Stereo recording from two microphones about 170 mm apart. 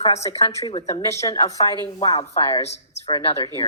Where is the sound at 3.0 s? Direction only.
25° left (ahead or behind).